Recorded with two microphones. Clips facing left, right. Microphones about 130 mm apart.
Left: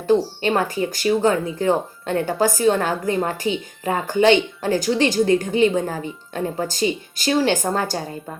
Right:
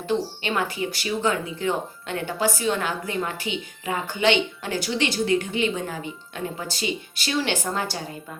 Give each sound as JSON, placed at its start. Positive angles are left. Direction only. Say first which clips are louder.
{"t": 0.0, "sound": "speech", "louder": "left 7 dB", "side_deg": 40}